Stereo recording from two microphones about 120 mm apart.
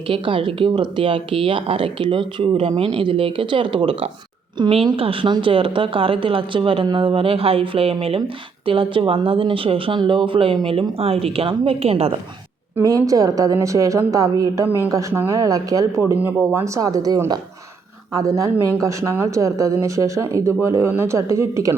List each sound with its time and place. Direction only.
0.1 s speech: 45° right (ahead or behind)
4.9 s speech: 50° right (ahead or behind)
12.8 s speech: 30° right (ahead or behind)
16.0 s speech: 15° right (ahead or behind)